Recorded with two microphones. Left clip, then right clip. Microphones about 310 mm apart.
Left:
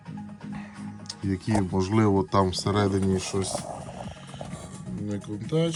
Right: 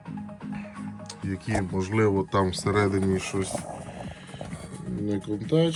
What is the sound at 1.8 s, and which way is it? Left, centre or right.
Speech, centre.